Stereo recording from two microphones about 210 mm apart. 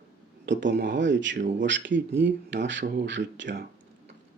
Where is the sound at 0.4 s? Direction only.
60° right (ahead or behind).